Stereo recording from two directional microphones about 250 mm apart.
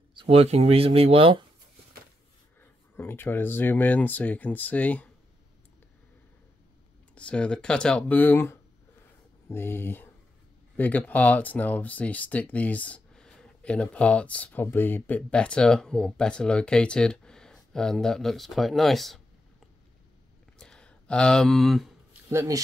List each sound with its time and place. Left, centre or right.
0.1 s speech: right
3.0 s speech: centre
7.2 s speech: centre
20.5 s a sound: centre